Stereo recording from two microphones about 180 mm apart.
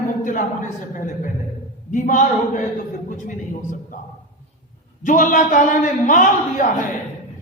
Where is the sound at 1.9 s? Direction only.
45° left (ahead or behind).